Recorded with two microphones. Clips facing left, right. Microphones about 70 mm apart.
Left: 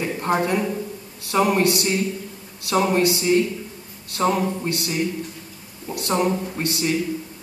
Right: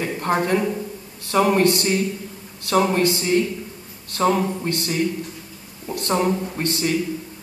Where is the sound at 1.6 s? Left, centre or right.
Right.